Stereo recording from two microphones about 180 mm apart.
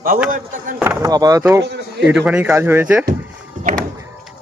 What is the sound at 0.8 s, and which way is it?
Speech, 15° right (ahead or behind).